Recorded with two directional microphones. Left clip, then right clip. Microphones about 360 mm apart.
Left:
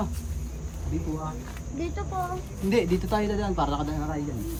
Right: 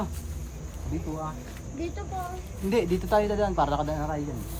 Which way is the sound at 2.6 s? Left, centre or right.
Centre.